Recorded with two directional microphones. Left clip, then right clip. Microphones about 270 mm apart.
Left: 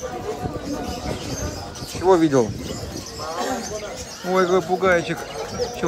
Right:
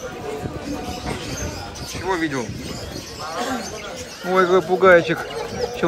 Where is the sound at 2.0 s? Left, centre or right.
Left.